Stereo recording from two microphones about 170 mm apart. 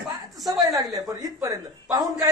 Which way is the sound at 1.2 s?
20° right (ahead or behind).